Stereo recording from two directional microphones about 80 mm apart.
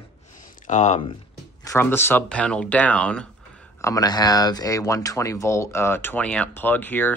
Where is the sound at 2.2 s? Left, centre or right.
Centre.